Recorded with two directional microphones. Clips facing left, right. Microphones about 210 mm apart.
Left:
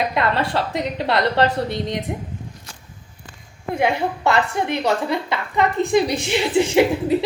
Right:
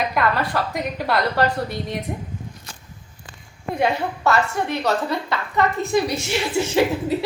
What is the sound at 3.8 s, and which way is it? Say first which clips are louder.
A woman's voice: left 1 dB; 15° left (ahead or behind).